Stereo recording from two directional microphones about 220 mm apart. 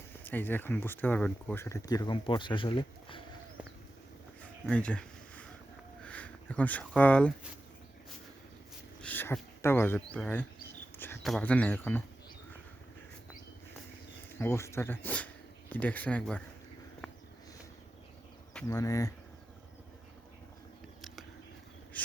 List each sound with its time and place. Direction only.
0.3 s speech: 10° left (ahead or behind)
4.4 s a sound: 5° left (ahead or behind)
9.0 s speech: 10° left (ahead or behind)
14.3 s speech: 10° left (ahead or behind)
18.7 s speech: 15° left (ahead or behind)